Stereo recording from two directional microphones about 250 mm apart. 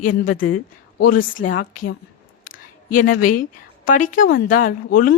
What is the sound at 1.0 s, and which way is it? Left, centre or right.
Speech, left.